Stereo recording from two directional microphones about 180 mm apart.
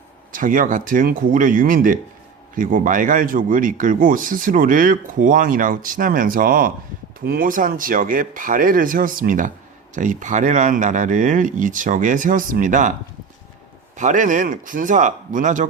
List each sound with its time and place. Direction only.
0.3 s speech: 50° right (ahead or behind)
13.9 s speech: 45° right (ahead or behind)